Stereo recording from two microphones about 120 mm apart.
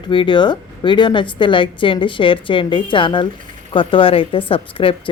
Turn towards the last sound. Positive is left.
turn(degrees=50)  # may be behind; listen again after turning